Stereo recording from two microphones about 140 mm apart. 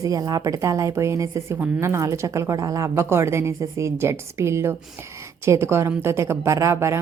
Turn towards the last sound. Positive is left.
turn(degrees=-20)  # may be behind; listen again after turning